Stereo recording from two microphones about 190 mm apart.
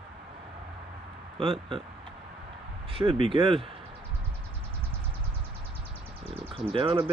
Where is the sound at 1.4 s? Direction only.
30° right (ahead or behind).